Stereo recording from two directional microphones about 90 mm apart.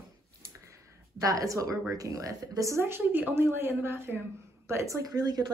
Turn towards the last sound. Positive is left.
turn(degrees=-45)  # may be behind; listen again after turning